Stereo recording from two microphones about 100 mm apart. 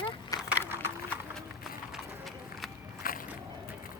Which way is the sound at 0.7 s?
20° right (ahead or behind).